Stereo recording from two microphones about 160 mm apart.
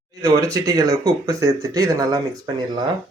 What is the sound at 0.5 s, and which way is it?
Speech, 20° right (ahead or behind).